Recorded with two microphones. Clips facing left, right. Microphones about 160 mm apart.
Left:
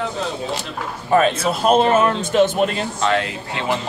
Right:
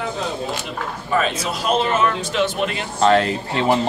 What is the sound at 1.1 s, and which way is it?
Speech, 55° left (ahead or behind).